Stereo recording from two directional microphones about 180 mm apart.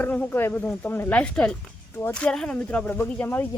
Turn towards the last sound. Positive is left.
turn(degrees=10)  # may be behind; listen again after turning